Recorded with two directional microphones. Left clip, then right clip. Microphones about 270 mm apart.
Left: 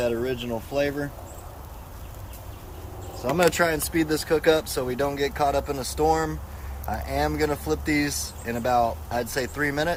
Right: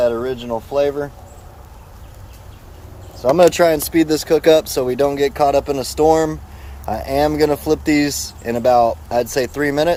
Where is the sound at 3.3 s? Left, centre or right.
Right.